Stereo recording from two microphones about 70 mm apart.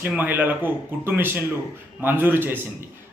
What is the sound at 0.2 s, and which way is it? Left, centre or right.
A man's voice, right.